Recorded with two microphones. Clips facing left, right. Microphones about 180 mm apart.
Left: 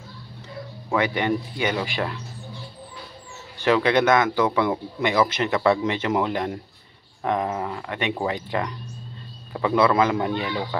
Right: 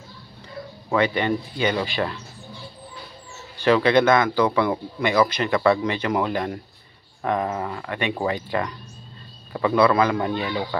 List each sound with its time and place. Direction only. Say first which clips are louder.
0.9 s speech: right 1 dB; 15° left (ahead or behind)
3.5 s speech: right 2 dB; 15° left (ahead or behind)